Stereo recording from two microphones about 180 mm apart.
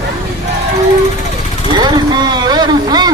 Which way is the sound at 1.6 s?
25° right (ahead or behind).